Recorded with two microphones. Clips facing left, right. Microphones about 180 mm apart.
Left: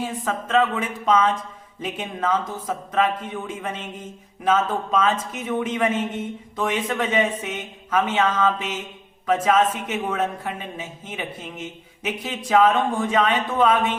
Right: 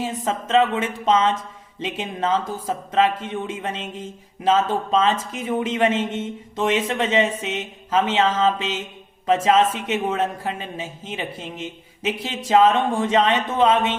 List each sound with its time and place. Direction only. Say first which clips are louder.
0.3 s speech: right 2 dB; 25° right (ahead or behind)